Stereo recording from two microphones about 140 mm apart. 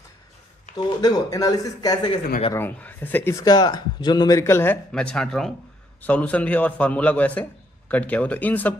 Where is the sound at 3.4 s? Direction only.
30° left (ahead or behind).